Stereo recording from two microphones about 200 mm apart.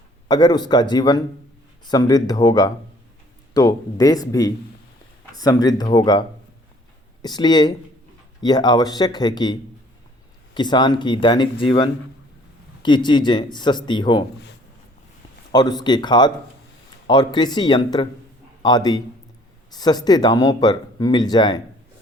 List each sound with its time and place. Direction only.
0.3 s speech: 20° left (ahead or behind)
15.5 s speech: 20° left (ahead or behind)